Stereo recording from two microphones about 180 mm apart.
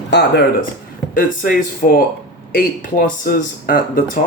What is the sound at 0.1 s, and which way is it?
Speech, 70° left (ahead or behind).